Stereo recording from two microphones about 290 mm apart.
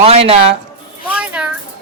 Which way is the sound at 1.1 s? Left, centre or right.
Centre.